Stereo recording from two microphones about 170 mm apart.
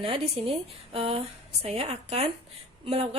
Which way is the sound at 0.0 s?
30° right (ahead or behind).